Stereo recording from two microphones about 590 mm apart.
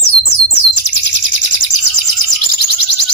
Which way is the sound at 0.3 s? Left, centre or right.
Left.